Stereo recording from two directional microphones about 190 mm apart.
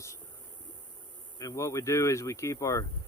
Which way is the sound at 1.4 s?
15° left (ahead or behind).